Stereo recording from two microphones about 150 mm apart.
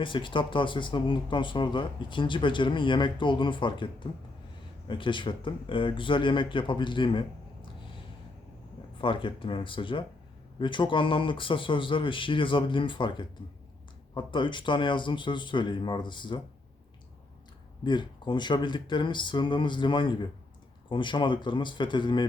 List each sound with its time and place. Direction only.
0.0 s speech: 35° left (ahead or behind)
9.0 s speech: 35° left (ahead or behind)
17.8 s speech: 30° left (ahead or behind)